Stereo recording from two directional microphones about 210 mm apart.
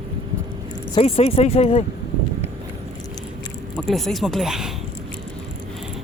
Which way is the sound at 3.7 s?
Centre (ahead or behind).